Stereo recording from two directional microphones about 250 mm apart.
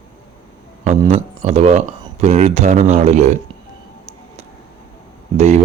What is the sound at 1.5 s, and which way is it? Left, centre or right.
Speech, right.